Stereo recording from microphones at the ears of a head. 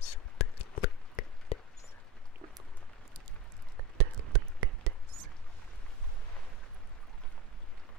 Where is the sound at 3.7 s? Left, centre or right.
Right.